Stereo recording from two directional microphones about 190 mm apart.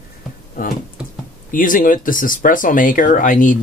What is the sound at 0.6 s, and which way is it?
Music, 45° left (ahead or behind).